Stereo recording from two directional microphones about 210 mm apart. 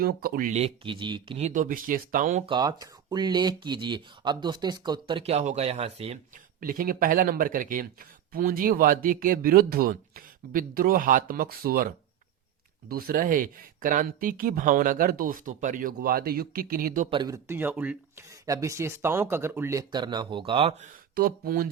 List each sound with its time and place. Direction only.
0.0 s speech: 45° right (ahead or behind)
2.5 s speech: 20° right (ahead or behind)
6.6 s speech: 40° right (ahead or behind)
12.9 s speech: 45° right (ahead or behind)
17.1 s speech: 20° right (ahead or behind)
21.2 s speech: 45° right (ahead or behind)